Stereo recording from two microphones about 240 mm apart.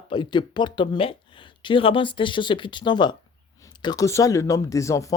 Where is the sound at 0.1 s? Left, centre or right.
Centre.